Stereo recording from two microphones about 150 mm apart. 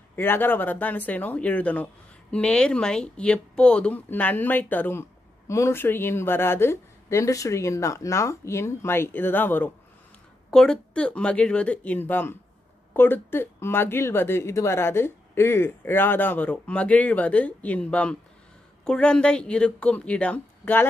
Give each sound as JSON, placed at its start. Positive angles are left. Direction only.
{"t": 0.1, "sound": "speech", "side_deg": 15}